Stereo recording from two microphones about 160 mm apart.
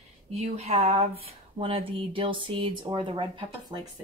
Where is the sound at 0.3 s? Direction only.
40° right (ahead or behind).